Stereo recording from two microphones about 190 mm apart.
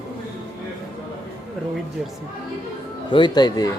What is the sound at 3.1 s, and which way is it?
Speech, 25° left (ahead or behind).